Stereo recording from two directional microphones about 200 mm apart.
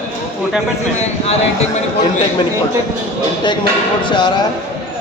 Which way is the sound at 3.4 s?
25° left (ahead or behind).